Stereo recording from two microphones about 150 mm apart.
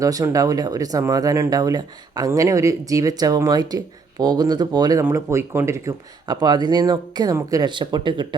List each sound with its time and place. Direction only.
0.0 s speech: 25° right (ahead or behind)